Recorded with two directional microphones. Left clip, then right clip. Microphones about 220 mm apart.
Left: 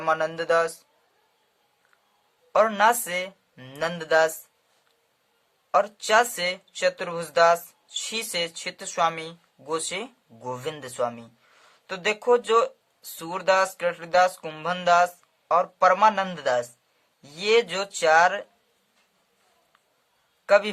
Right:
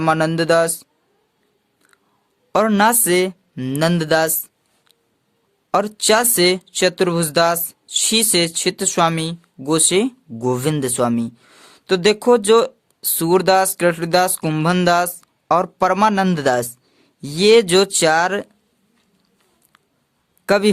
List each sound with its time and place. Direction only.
0.0 s speech: 40° right (ahead or behind)
2.5 s speech: 45° right (ahead or behind)
5.7 s speech: 45° right (ahead or behind)
20.4 s a man's voice: 45° right (ahead or behind)